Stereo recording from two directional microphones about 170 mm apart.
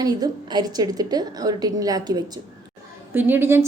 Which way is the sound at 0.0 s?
25° right (ahead or behind).